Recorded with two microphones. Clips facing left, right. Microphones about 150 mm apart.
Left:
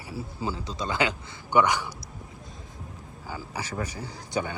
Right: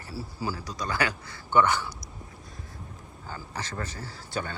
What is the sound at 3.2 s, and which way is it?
Speech, 10° left (ahead or behind).